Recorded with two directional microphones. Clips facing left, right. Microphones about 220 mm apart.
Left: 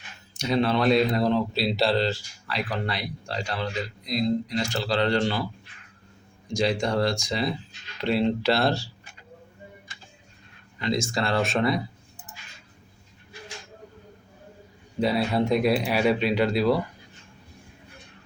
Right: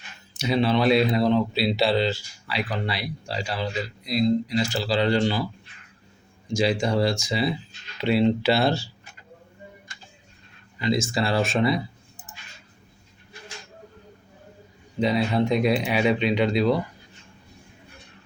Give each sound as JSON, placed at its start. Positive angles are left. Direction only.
{"t": 0.3, "sound": "speech", "side_deg": -5}
{"t": 6.5, "sound": "speech", "side_deg": 0}
{"t": 10.8, "sound": "speech", "side_deg": -5}
{"t": 15.0, "sound": "speech", "side_deg": 5}